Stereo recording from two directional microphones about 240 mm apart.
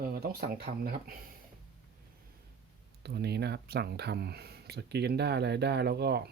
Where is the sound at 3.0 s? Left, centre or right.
Right.